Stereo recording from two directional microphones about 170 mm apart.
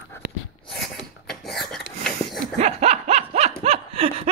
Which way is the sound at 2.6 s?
40° right (ahead or behind).